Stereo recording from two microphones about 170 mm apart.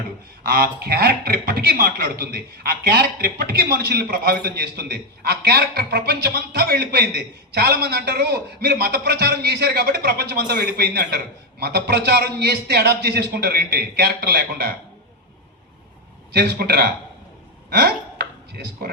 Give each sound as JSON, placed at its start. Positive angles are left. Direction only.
{"t": 0.4, "sound": "a man's voice", "side_deg": -65}
{"t": 16.3, "sound": "a man's voice", "side_deg": -65}
{"t": 17.7, "sound": "a sound", "side_deg": -70}